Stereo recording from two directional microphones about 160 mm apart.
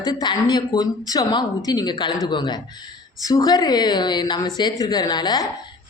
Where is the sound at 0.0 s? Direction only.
25° left (ahead or behind).